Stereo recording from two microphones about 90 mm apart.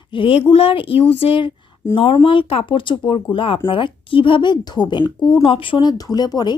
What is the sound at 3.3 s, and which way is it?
A woman's voice, 80° left.